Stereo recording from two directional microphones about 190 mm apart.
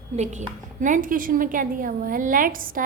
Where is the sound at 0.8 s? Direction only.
45° right (ahead or behind).